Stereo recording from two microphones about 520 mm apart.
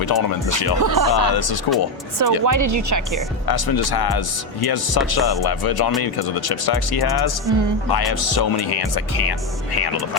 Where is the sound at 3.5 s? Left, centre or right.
Left.